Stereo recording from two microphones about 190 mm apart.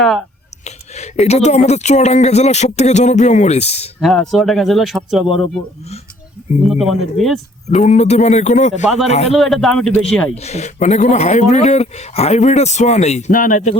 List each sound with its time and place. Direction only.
0.6 s speech: 35° left (ahead or behind)
4.0 s speech: 5° left (ahead or behind)
6.7 s speech: centre (ahead or behind)
7.7 s speech: 40° left (ahead or behind)
9.3 s speech: centre (ahead or behind)
10.3 s speech: 35° left (ahead or behind)